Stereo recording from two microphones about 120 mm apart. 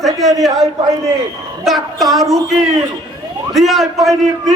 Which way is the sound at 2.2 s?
30° right (ahead or behind).